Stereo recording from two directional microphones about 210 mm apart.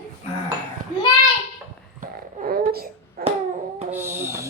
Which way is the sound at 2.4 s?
45° right (ahead or behind).